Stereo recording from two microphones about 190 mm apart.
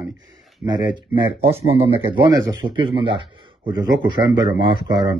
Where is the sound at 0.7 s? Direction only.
25° right (ahead or behind).